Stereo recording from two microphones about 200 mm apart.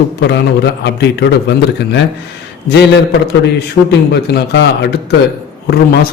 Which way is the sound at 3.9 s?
60° left (ahead or behind).